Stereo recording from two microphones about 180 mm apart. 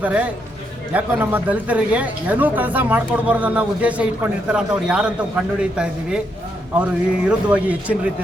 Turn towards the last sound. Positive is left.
turn(degrees=-10)  # may be behind; listen again after turning